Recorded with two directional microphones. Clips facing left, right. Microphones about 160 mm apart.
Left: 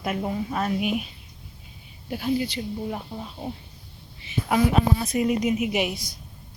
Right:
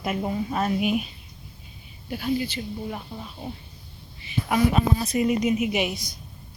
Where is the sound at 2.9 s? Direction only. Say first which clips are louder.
Left 2 dB; 25° left (ahead or behind).